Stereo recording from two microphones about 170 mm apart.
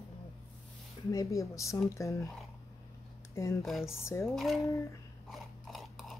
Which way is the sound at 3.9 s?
15° left (ahead or behind).